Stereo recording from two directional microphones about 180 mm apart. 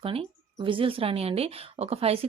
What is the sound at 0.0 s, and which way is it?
Speech, 30° right (ahead or behind).